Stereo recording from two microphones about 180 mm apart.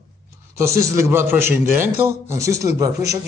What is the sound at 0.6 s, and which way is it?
A man's voice, 15° right (ahead or behind).